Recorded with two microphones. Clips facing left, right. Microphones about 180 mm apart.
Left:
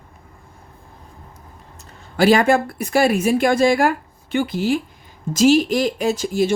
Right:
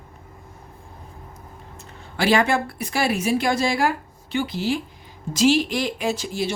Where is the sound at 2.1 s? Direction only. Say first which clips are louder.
Left 5 dB; 40° left (ahead or behind).